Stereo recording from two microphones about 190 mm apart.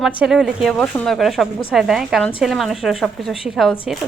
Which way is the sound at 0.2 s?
Centre (ahead or behind).